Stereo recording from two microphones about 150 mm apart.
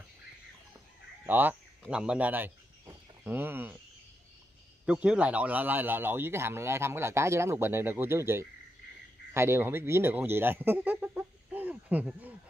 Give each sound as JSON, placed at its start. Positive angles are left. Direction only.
{"t": 1.2, "sound": "speech", "side_deg": -10}
{"t": 4.8, "sound": "speech", "side_deg": -5}